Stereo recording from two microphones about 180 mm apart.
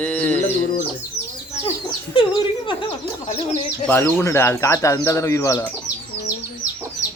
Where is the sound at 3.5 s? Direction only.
10° left (ahead or behind).